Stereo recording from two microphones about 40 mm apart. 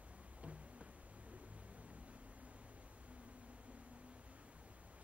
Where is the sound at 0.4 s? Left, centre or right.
Right.